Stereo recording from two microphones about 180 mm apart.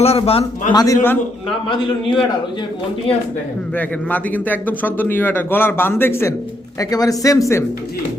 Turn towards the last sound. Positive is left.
turn(degrees=15)  # may be behind; listen again after turning